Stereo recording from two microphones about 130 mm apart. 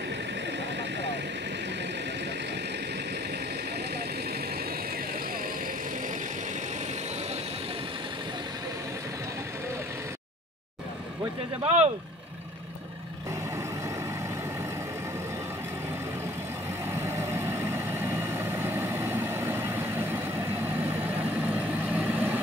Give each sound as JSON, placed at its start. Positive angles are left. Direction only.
{"t": 11.6, "sound": "speech", "side_deg": -60}
{"t": 17.6, "sound": "vehicle", "side_deg": -20}
{"t": 21.5, "sound": "vehicle", "side_deg": -10}